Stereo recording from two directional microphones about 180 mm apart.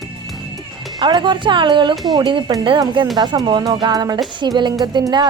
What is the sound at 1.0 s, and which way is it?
Speech, 25° right (ahead or behind).